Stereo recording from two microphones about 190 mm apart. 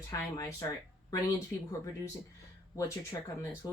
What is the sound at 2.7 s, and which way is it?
Speech, 15° left (ahead or behind).